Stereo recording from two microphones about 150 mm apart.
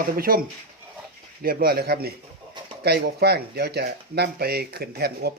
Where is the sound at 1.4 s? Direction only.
85° right.